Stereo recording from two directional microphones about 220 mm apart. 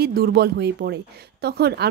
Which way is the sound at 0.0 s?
45° right (ahead or behind).